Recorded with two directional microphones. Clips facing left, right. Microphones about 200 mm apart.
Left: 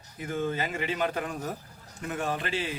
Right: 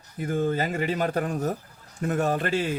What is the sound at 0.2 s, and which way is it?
Speech, 40° right (ahead or behind).